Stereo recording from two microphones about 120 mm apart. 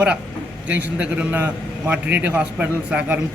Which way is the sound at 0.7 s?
10° right (ahead or behind).